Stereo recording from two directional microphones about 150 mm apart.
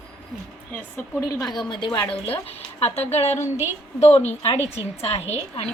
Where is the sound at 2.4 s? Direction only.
45° left (ahead or behind).